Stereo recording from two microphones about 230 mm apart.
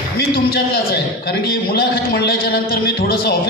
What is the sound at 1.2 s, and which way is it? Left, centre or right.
A man's voice, left.